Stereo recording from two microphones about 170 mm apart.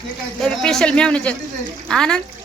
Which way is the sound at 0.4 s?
5° left (ahead or behind).